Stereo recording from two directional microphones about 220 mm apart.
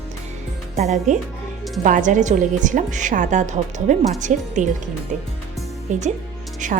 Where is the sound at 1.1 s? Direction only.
35° right (ahead or behind).